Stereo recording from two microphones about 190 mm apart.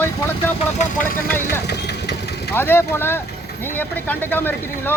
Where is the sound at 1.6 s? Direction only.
60° left (ahead or behind).